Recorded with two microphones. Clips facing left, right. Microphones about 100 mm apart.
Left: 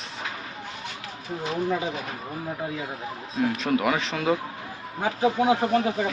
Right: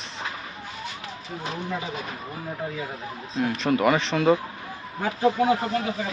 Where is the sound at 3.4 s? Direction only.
Centre (ahead or behind).